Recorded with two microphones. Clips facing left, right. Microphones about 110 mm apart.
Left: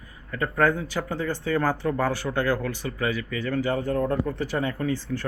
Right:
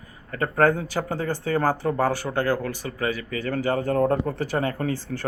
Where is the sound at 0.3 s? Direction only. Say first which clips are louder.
Right 2 dB; 45° right (ahead or behind).